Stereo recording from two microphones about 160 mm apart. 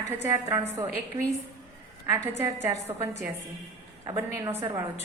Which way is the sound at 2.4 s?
15° right (ahead or behind).